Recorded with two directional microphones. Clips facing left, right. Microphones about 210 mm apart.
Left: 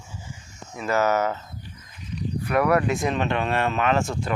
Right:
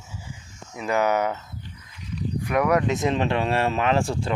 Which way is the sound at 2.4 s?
15° right (ahead or behind).